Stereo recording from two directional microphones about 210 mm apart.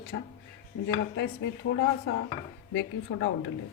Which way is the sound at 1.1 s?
55° left (ahead or behind).